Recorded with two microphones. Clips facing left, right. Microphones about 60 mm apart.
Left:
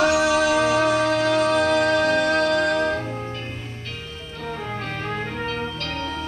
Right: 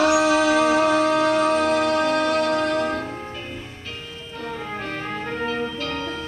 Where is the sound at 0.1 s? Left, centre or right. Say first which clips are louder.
Right 1 dB; right.